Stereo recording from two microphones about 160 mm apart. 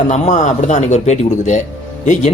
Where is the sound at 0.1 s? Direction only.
50° left (ahead or behind).